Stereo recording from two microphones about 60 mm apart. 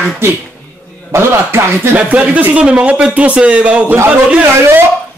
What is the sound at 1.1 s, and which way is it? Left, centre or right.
Speech, right.